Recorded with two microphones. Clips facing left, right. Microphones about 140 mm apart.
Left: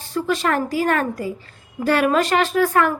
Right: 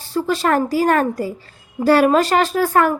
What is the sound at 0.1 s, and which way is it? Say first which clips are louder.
Speech: right 3 dB; 35° right (ahead or behind).